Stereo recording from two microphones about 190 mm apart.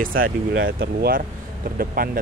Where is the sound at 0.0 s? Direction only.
50° right (ahead or behind).